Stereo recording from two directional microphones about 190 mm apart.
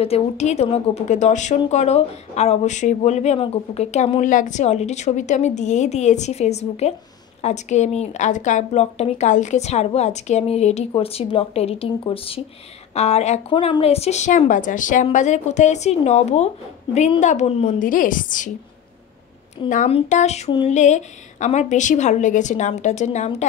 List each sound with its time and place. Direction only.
0.0 s speech: 35° left (ahead or behind)
17.7 s a woman's voice: 45° left (ahead or behind)
19.9 s speech: 35° left (ahead or behind)